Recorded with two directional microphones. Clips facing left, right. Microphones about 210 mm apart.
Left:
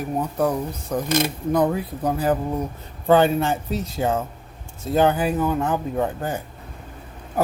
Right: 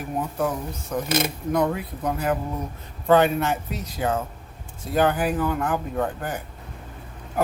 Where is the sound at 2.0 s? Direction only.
30° left (ahead or behind).